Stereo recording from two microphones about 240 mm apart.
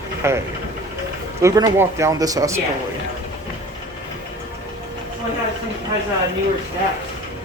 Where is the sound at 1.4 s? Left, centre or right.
Centre.